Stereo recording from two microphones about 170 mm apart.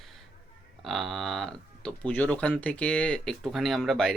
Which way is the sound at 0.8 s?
Centre (ahead or behind).